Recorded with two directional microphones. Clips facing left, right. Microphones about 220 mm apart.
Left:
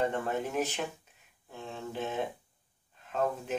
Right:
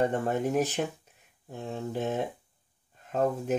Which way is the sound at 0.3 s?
40° right (ahead or behind).